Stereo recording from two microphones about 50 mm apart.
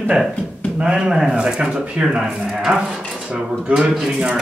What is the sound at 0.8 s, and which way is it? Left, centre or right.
Speech, centre.